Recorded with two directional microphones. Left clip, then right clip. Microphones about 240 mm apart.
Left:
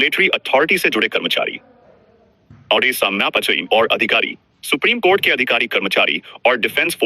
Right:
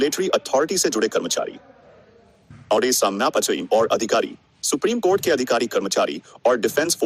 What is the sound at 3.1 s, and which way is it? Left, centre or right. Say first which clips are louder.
Speech: left 4 dB; centre.